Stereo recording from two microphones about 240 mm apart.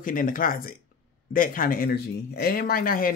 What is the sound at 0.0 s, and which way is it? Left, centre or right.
Speech, left.